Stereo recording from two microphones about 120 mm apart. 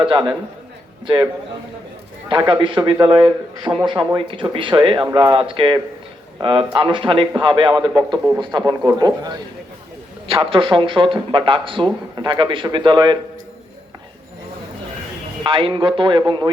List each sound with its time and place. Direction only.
0.0 s a man's voice: 40° right (ahead or behind)
2.3 s a man's voice: 40° right (ahead or behind)
10.2 s speech: 50° right (ahead or behind)
15.4 s speech: 45° right (ahead or behind)